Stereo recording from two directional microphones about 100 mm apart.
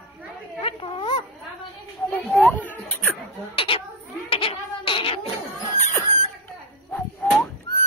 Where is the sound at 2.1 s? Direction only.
15° left (ahead or behind).